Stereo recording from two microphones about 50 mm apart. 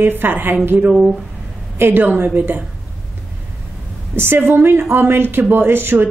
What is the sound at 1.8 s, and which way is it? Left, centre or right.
Speech, right.